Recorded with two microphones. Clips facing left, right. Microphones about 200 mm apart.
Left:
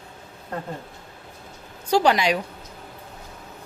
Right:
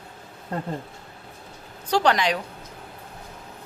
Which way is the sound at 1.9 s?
10° left (ahead or behind).